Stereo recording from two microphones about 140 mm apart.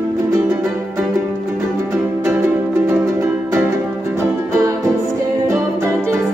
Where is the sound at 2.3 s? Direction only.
20° right (ahead or behind).